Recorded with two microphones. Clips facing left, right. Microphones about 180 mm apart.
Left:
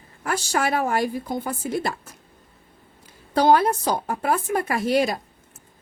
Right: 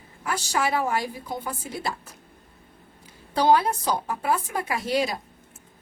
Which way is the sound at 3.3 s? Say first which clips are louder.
Left 3 dB; 50° left (ahead or behind).